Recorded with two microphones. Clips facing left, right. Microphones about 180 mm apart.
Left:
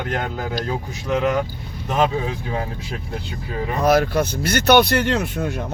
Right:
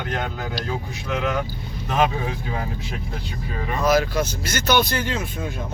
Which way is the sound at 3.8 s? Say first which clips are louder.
Left 3 dB; 60° left (ahead or behind).